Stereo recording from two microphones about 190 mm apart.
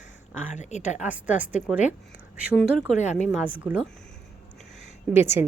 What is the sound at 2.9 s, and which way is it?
Speech, 40° left (ahead or behind).